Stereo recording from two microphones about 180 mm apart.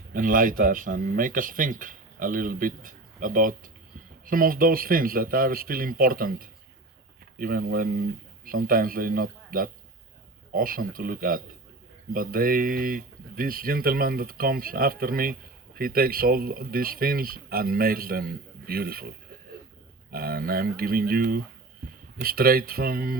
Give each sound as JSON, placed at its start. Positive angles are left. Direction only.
{"t": 0.1, "sound": "speech", "side_deg": -50}